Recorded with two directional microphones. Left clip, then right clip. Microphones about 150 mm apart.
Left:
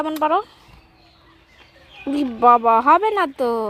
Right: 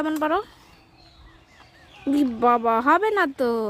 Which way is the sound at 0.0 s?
15° right (ahead or behind).